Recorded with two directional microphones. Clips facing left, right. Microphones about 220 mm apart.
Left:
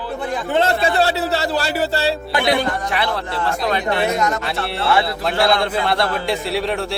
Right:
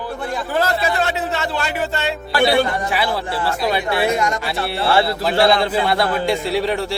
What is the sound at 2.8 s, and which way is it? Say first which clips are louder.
A man's voice: right 1 dB; 5° right (ahead or behind).